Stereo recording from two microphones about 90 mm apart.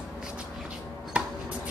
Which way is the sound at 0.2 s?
10° right (ahead or behind).